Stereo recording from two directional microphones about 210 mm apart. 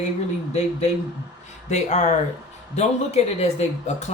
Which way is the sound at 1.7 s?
35° left (ahead or behind).